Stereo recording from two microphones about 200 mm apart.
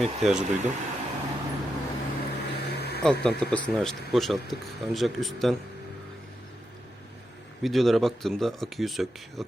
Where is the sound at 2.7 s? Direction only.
55° left (ahead or behind).